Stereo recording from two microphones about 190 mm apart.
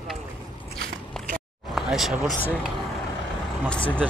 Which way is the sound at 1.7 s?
Centre (ahead or behind).